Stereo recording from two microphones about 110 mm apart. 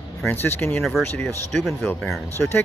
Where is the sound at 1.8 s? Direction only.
15° left (ahead or behind).